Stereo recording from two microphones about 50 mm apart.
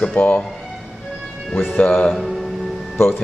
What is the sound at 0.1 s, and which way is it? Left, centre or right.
Speech, left.